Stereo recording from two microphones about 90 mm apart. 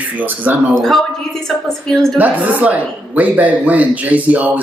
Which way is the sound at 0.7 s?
5° left (ahead or behind).